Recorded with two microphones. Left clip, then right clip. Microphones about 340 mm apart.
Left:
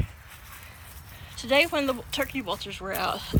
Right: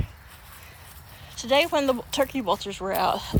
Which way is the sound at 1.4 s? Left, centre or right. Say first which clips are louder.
Right 1 dB; centre.